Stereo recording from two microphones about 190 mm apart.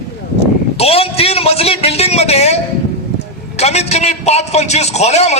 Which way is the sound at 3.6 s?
35° left (ahead or behind).